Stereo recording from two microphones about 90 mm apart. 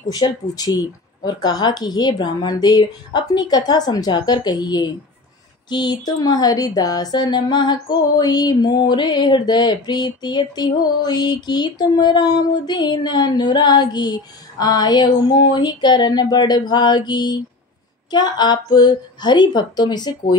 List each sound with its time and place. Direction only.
0.1 s speech: 45° left (ahead or behind)